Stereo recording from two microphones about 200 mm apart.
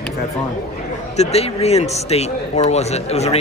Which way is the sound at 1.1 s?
30° left (ahead or behind).